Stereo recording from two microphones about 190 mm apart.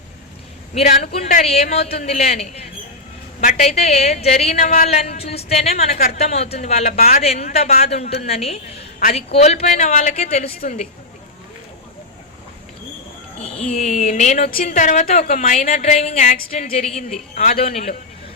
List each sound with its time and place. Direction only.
0.7 s a woman's voice: 35° left (ahead or behind)
13.7 s a woman's voice: 35° left (ahead or behind)
16.7 s a woman's voice: 35° left (ahead or behind)